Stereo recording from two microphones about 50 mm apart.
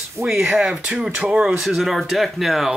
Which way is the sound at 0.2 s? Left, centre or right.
Centre.